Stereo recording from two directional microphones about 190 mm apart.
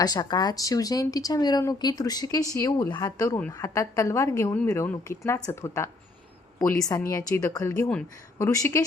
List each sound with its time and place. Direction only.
0.0 s a woman's voice: 20° left (ahead or behind)
7.1 s a woman's voice: 15° left (ahead or behind)